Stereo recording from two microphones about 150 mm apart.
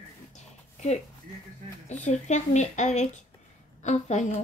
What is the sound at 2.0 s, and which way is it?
Speech, 50° left (ahead or behind).